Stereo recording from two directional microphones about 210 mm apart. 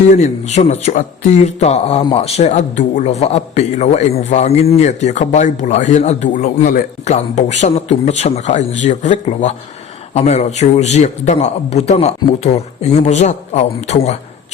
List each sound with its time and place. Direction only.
0.1 s a man's voice: 35° left (ahead or behind)